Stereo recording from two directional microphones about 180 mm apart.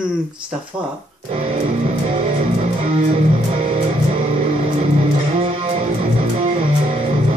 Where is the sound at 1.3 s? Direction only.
30° right (ahead or behind).